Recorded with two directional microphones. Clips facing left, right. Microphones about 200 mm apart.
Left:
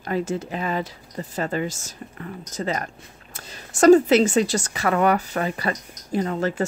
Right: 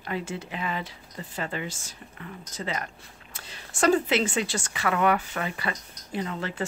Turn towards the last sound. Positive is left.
turn(degrees=40)  # may be behind; listen again after turning